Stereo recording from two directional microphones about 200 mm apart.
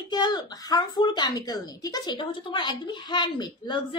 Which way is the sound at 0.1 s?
20° left (ahead or behind).